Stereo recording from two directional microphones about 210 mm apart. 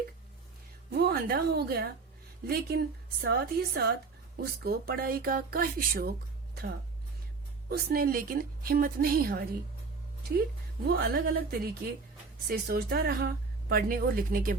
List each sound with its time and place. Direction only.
0.9 s a woman's voice: 50° right (ahead or behind)
10.8 s speech: 45° right (ahead or behind)